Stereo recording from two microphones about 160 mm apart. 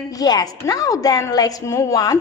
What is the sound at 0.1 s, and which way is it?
A woman's voice, 25° left (ahead or behind).